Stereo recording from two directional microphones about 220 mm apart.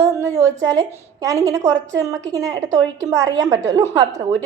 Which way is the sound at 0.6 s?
15° right (ahead or behind).